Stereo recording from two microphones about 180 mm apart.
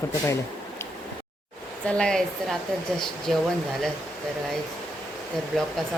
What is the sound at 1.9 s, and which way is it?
Speech, 5° left (ahead or behind).